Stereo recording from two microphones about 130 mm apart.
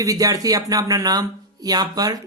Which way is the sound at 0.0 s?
25° right (ahead or behind).